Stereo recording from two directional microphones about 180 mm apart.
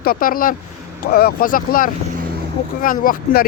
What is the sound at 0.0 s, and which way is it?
Speech, 55° left (ahead or behind).